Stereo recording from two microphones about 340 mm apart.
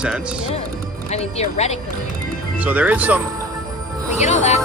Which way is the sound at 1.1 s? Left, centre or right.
Centre.